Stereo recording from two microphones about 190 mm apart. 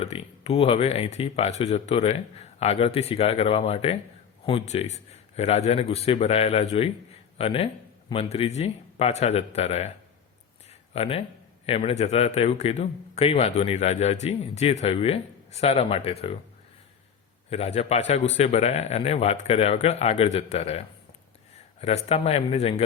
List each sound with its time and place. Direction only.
0.0 s a man's voice: 35° left (ahead or behind)
10.7 s a sound: 30° left (ahead or behind)
11.6 s a man's voice: 30° left (ahead or behind)
17.5 s a man's voice: 30° left (ahead or behind)